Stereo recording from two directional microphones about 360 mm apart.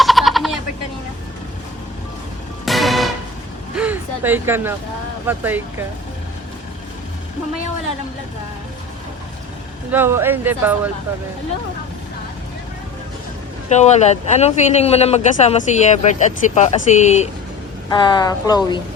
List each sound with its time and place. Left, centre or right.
0.0 s a sound: centre
2.6 s music: centre
3.8 s a sound: centre
5.2 s speech: centre
9.9 s speech: centre
13.7 s speech: centre